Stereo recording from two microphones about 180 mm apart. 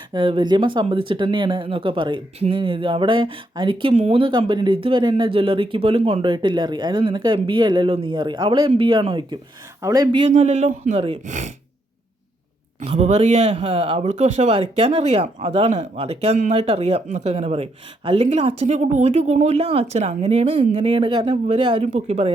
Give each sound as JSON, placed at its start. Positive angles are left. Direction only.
{"t": 0.1, "sound": "speech", "side_deg": -25}
{"t": 10.3, "sound": "speech", "side_deg": -40}
{"t": 12.8, "sound": "speech", "side_deg": -35}